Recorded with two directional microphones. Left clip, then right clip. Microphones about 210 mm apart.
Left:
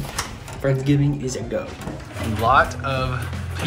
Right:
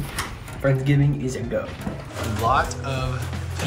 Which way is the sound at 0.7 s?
5° left (ahead or behind).